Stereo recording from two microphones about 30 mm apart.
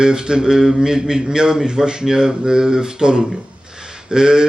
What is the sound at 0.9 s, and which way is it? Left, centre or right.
Speech, right.